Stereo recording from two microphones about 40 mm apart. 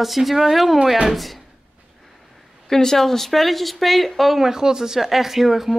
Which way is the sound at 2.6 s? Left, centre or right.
Centre.